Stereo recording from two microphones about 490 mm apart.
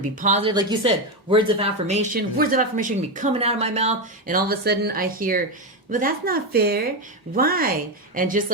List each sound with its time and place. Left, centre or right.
0.2 s speech: centre